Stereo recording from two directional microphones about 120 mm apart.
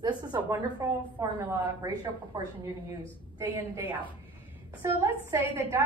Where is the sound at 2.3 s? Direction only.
35° right (ahead or behind).